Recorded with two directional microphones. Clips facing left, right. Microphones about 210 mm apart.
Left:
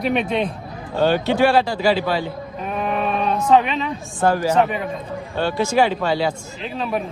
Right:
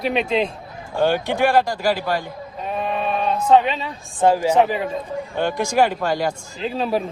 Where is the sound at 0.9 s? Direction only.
15° right (ahead or behind).